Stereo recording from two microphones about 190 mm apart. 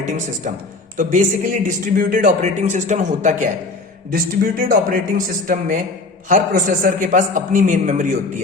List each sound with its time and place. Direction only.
0.9 s a man's voice: 45° right (ahead or behind)